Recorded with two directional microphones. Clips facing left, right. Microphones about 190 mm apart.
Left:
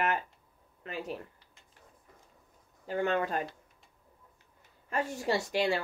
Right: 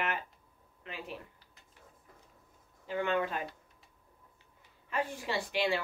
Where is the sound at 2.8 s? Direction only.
45° left (ahead or behind).